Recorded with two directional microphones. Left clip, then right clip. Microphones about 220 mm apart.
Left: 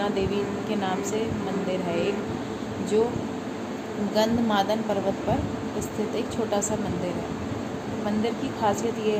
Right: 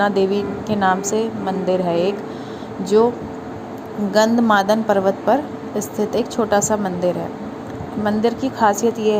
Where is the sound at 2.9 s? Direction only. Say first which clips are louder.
Right 9 dB; 35° right (ahead or behind).